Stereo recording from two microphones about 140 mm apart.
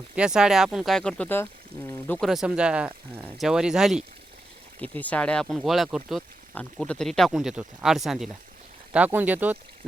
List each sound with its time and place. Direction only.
0.2 s speech: 5° right (ahead or behind)
4.8 s speech: 10° left (ahead or behind); by 9.6 s 10° right (ahead or behind)